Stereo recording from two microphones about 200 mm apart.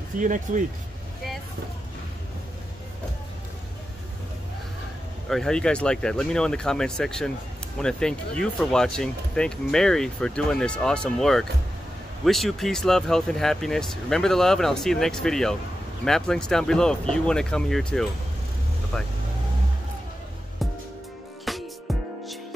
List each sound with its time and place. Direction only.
0.2 s speech: 40° right (ahead or behind)
5.3 s speech: 5° left (ahead or behind)
21.5 s music: centre (ahead or behind)